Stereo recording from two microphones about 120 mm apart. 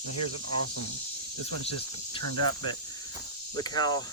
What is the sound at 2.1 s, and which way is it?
Speech, 40° left (ahead or behind).